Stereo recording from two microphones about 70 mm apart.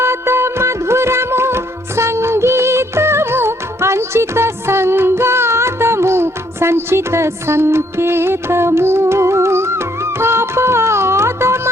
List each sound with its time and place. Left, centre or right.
0.0 s music: right